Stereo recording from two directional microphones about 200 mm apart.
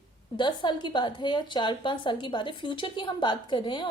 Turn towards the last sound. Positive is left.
turn(degrees=25)  # may be behind; listen again after turning